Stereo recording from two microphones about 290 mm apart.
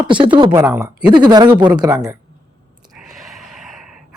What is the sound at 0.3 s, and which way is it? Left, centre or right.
Speech, centre.